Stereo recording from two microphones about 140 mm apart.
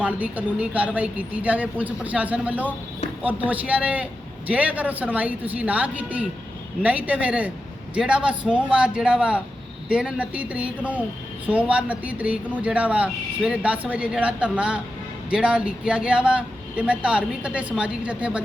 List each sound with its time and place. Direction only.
0.0 s speech: 10° right (ahead or behind)